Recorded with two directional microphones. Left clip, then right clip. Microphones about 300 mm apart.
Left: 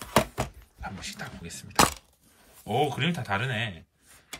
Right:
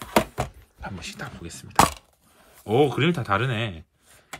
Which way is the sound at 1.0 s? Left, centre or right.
Centre.